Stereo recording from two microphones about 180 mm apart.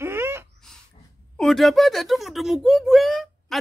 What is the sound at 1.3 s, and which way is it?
Speech, centre (ahead or behind).